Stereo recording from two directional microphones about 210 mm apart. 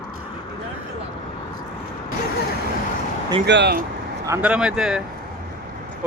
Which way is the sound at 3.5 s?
55° right (ahead or behind).